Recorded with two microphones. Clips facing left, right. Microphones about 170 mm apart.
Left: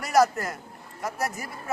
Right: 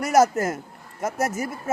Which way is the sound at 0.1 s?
45° right (ahead or behind).